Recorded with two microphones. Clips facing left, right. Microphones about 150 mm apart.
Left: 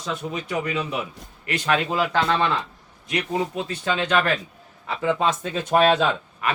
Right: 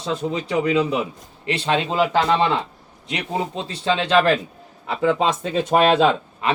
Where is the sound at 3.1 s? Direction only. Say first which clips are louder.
Even; 25° right (ahead or behind).